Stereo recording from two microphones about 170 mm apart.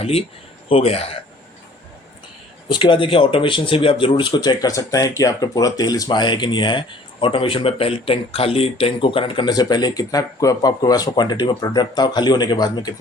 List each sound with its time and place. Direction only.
0.0 s speech: 35° left (ahead or behind)
2.6 s speech: 30° left (ahead or behind)